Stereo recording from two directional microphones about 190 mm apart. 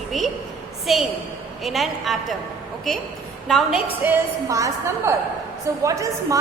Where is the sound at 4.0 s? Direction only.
15° right (ahead or behind).